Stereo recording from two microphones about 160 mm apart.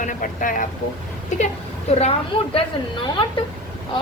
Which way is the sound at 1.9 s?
40° left (ahead or behind).